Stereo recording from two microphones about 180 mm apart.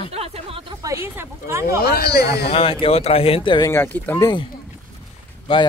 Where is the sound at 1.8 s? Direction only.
60° left (ahead or behind).